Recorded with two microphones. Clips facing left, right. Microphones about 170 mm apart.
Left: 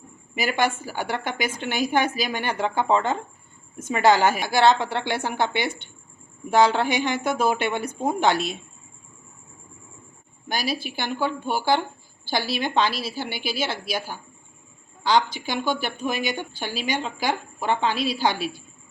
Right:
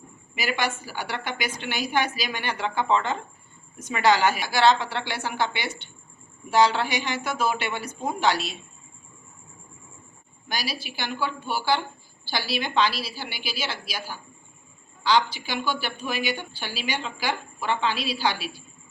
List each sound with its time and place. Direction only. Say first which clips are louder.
0.3 s a woman's voice: left 4 dB; 50° left (ahead or behind)
10.5 s a woman's voice: left 5 dB; 50° left (ahead or behind)